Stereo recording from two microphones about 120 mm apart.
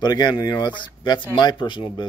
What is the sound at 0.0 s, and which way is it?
Speech, 35° left (ahead or behind).